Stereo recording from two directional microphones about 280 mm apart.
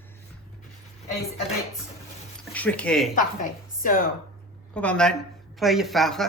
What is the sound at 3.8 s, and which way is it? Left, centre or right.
Speech, left.